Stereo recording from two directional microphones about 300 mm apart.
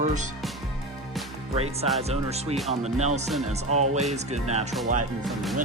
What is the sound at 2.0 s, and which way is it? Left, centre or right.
Speech, right.